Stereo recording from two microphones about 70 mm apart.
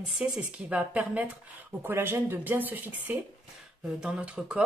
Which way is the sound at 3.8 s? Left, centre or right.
Centre.